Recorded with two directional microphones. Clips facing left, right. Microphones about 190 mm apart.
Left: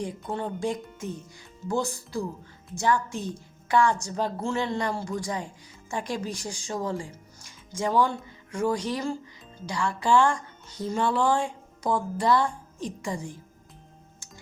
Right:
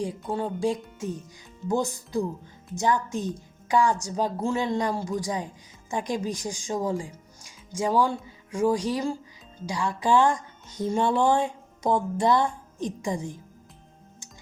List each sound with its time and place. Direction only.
0.0 s speech: 10° right (ahead or behind)